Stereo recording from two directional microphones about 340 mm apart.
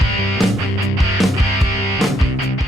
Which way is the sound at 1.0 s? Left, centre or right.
Centre.